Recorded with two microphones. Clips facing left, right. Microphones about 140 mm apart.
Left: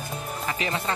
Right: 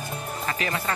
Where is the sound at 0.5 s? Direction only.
20° left (ahead or behind).